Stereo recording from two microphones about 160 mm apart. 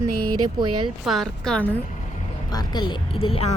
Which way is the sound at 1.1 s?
Centre (ahead or behind).